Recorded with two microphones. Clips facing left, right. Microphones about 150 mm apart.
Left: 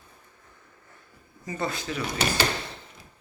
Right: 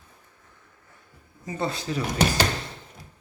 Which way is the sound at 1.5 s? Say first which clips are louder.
Right 2 dB; 25° right (ahead or behind).